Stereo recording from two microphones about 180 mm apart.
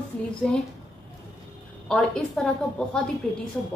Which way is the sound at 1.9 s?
5° left (ahead or behind).